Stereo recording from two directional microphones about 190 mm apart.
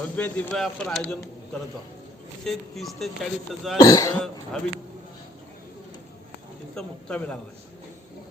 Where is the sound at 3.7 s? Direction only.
20° left (ahead or behind).